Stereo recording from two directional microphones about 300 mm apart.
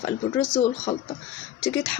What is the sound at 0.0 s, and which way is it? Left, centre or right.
Speech, centre.